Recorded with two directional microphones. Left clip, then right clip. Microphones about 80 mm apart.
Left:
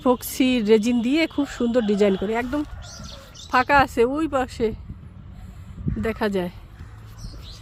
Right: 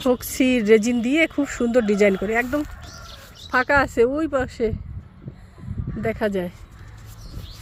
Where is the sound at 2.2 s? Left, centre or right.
Left.